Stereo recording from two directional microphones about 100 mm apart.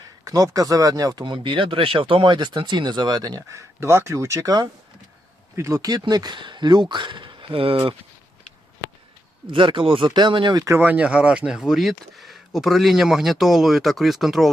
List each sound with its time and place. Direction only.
0.3 s speech: 35° right (ahead or behind)
1.2 s speech: 55° right (ahead or behind)
3.5 s speech: 25° right (ahead or behind)
5.5 s speech: 30° right (ahead or behind); by 7.8 s 65° right (ahead or behind)
9.5 s speech: 60° right (ahead or behind)
10.8 s speech: 15° right (ahead or behind)